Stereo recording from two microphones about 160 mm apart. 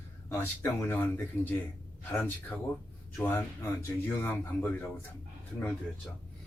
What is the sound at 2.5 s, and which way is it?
Speech, 10° left (ahead or behind).